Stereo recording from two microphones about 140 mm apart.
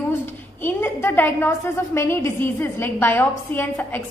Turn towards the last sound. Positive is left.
turn(degrees=15)  # may be behind; listen again after turning